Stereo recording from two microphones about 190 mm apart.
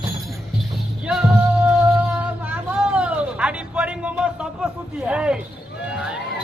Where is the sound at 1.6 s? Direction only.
10° right (ahead or behind).